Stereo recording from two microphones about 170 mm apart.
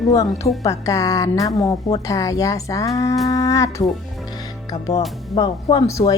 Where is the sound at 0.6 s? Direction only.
20° left (ahead or behind).